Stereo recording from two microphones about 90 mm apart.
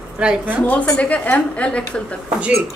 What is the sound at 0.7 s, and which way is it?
A woman's voice, 15° left (ahead or behind).